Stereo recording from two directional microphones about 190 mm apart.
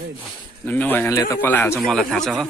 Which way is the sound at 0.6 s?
10° left (ahead or behind).